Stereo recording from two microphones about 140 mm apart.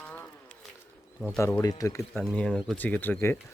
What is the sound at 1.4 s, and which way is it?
Speech, 15° left (ahead or behind).